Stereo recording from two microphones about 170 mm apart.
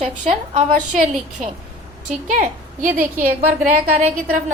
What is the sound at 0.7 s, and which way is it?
A woman's voice, 45° right (ahead or behind).